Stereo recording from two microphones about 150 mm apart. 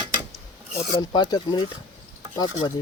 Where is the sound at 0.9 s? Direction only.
30° left (ahead or behind).